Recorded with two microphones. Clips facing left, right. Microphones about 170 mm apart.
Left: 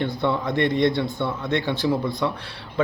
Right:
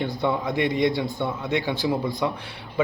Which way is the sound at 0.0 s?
15° right (ahead or behind).